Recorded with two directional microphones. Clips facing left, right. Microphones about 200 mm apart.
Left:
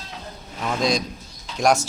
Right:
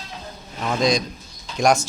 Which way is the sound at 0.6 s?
Centre (ahead or behind).